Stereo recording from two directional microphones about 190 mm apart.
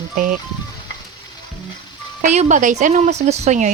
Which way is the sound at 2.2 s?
40° right (ahead or behind).